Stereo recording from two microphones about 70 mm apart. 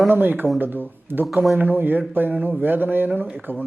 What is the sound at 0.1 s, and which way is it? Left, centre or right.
Speech, right.